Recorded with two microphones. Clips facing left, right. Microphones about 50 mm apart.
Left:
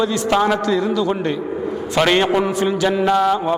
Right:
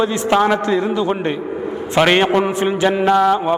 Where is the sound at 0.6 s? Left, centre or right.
Right.